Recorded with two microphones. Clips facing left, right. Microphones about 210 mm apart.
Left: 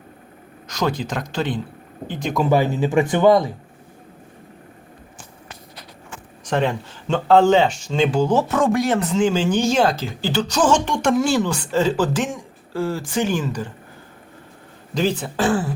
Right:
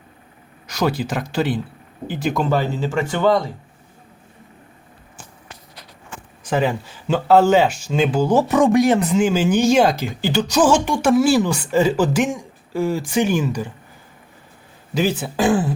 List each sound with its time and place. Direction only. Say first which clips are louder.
0.7 s speech: right 2 dB; 10° right (ahead or behind)
2.5 s speech: left 3 dB; 15° left (ahead or behind)
6.4 s speech: right 1 dB; 5° right (ahead or behind)
14.9 s speech: right 1 dB; 5° right (ahead or behind)